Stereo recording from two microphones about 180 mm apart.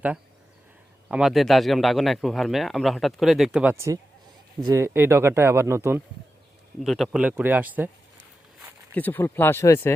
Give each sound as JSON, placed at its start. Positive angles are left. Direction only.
{"t": 1.0, "sound": "a man's voice", "side_deg": -5}
{"t": 4.6, "sound": "speech", "side_deg": -15}
{"t": 6.7, "sound": "speech", "side_deg": 0}
{"t": 9.0, "sound": "speech", "side_deg": 10}